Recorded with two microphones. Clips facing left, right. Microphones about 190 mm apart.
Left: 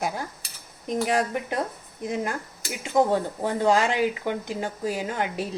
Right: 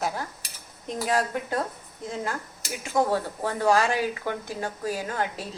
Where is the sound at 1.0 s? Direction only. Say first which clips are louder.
Even; 15° left (ahead or behind).